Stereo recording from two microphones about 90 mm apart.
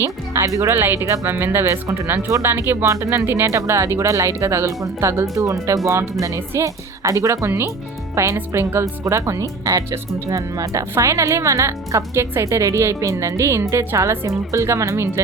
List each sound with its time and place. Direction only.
0.0 s speech: 35° right (ahead or behind)